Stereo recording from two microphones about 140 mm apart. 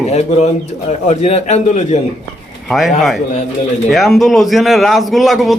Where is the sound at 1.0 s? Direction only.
55° left (ahead or behind).